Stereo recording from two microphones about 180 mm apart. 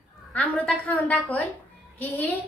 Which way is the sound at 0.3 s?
10° left (ahead or behind).